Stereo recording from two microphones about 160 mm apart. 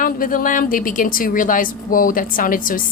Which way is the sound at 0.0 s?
60° left (ahead or behind).